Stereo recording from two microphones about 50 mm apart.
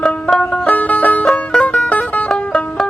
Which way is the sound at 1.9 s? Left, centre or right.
Left.